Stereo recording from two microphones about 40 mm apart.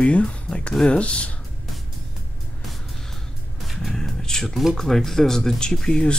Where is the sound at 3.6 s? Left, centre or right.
Centre.